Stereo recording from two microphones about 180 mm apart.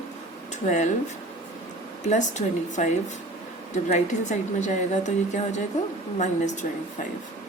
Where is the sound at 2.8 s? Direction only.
45° left (ahead or behind).